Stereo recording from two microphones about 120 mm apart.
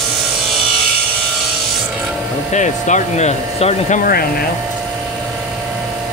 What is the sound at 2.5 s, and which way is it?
Speech, 85° left.